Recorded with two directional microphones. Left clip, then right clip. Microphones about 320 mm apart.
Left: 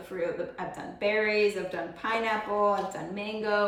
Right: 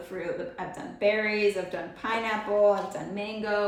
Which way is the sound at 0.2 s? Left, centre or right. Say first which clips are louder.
Left 2 dB; centre.